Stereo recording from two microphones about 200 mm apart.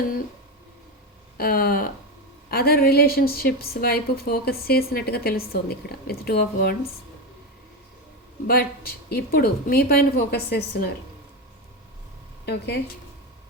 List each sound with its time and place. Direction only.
1.4 s a woman's voice: 50° left (ahead or behind)
9.0 s a woman's voice: 50° left (ahead or behind)
12.5 s speech: 55° left (ahead or behind)